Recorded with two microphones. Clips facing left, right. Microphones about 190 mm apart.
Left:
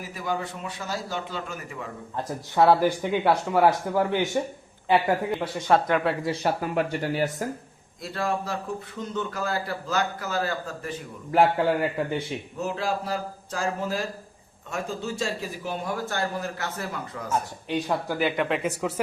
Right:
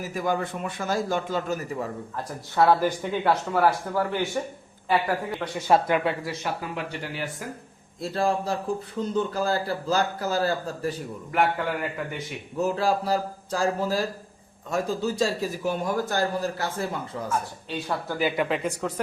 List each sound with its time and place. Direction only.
0.0 s a man's voice: 45° right (ahead or behind)
2.6 s a man's voice: 15° left (ahead or behind)
5.5 s speech: 10° right (ahead or behind)
6.2 s a man's voice: 35° left (ahead or behind)
6.6 s speech: 45° left (ahead or behind)
8.0 s speech: 30° right (ahead or behind)
11.3 s a man's voice: 30° left (ahead or behind)
12.6 s speech: 35° right (ahead or behind)
17.7 s a man's voice: 15° left (ahead or behind)
18.2 s speech: centre (ahead or behind)